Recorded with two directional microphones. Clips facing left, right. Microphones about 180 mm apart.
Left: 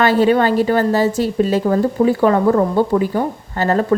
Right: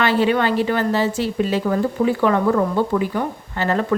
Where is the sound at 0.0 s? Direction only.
40° left (ahead or behind).